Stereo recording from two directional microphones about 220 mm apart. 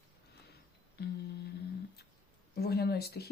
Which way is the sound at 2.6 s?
45° left (ahead or behind).